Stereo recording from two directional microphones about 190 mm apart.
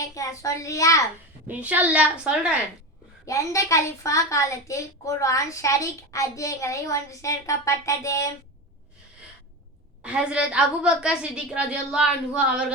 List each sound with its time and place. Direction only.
0.0 s a woman's voice: 15° left (ahead or behind)
1.5 s a woman's voice: 10° right (ahead or behind)
3.2 s a woman's voice: 15° left (ahead or behind)
10.0 s a woman's voice: 5° right (ahead or behind)